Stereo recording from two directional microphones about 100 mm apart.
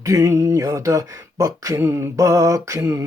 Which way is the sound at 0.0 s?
35° right (ahead or behind).